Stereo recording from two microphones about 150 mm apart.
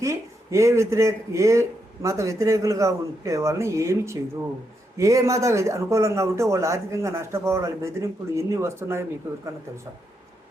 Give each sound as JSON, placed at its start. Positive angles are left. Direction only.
{"t": 0.0, "sound": "speech", "side_deg": -20}